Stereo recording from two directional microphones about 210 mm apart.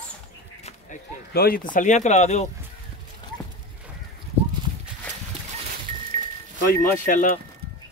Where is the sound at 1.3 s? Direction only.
45° left (ahead or behind).